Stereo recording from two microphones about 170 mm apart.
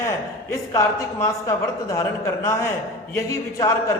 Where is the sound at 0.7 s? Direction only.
15° left (ahead or behind).